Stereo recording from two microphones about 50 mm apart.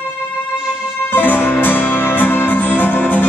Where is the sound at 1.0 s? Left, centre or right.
Left.